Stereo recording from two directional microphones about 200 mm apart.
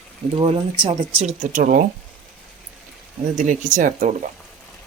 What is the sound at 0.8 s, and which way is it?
Speech, 25° right (ahead or behind).